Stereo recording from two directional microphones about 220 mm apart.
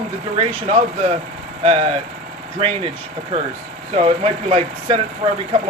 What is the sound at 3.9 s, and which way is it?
Speech, 30° right (ahead or behind).